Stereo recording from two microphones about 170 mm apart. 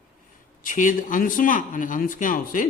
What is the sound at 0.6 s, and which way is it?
A man's voice, 50° left (ahead or behind).